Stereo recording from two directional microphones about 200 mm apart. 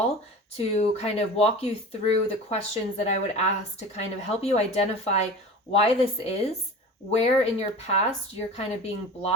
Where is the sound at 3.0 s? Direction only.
30° left (ahead or behind).